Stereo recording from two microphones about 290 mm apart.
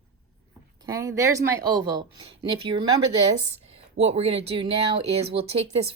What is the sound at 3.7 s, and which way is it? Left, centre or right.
Speech, right.